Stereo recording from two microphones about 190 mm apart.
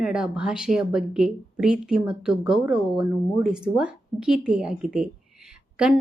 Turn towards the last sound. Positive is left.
turn(degrees=-5)  # may be behind; listen again after turning